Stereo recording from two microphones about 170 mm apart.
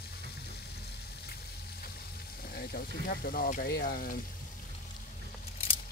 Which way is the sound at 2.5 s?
60° left (ahead or behind).